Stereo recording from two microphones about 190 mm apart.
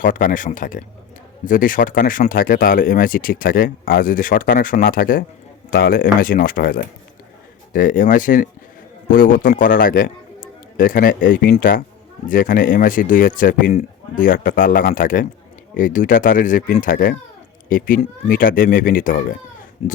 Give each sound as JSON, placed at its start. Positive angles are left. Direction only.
{"t": 0.0, "sound": "a man's voice", "side_deg": 45}
{"t": 19.8, "sound": "speech", "side_deg": 35}